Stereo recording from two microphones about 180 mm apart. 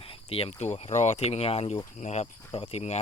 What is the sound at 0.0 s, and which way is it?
Speech, 30° left (ahead or behind).